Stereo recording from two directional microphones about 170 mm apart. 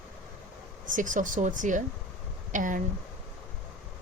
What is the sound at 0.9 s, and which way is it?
Speech, 50° right (ahead or behind).